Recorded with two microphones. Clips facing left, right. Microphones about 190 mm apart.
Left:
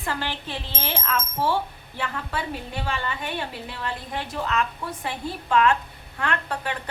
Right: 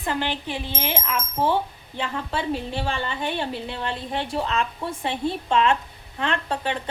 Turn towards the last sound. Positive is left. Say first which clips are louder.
# right 2 dB
turn(degrees=-25)  # may be behind; listen again after turning